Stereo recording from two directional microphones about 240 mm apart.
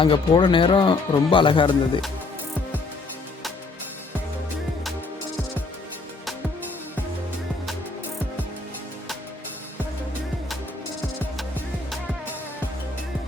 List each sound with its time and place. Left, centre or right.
0.0 s speech: centre